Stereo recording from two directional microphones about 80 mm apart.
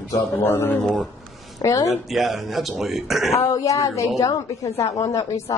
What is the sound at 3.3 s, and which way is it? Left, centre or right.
A woman's voice, left.